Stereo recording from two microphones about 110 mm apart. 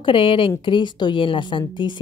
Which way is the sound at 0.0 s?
50° left (ahead or behind).